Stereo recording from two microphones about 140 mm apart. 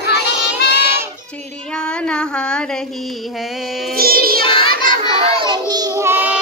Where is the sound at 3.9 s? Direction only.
90° right.